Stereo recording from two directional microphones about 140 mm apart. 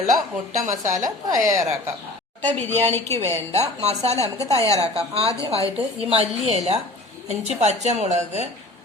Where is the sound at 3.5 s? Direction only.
50° right (ahead or behind).